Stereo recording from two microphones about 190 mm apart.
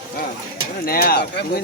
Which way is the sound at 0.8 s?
50° left (ahead or behind).